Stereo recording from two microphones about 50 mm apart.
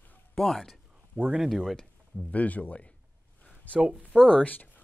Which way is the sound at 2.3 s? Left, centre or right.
Left.